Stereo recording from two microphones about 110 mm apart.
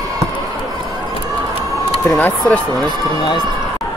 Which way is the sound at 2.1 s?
15° left (ahead or behind).